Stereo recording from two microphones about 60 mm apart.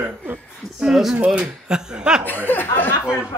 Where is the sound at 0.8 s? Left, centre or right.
Centre.